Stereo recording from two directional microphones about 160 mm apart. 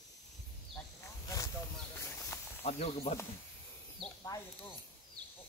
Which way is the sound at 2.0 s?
15° left (ahead or behind).